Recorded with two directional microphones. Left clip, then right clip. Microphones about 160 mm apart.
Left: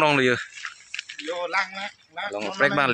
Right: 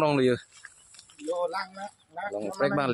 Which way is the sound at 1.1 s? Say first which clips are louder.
Left 2 dB; 15° left (ahead or behind).